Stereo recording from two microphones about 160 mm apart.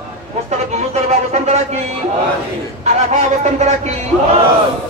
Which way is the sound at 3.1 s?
45° right (ahead or behind).